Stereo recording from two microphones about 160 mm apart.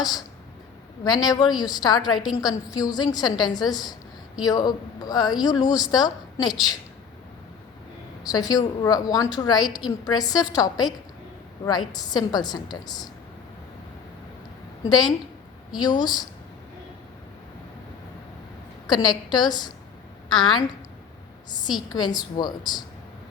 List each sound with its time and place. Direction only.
1.0 s a woman's voice: 25° left (ahead or behind)
8.2 s a woman's voice: 25° left (ahead or behind)
15.8 s a woman's voice: 25° left (ahead or behind)
18.9 s a woman's voice: 25° left (ahead or behind)
21.9 s a woman's voice: 25° left (ahead or behind)